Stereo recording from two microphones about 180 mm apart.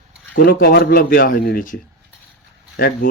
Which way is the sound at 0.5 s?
65° left (ahead or behind).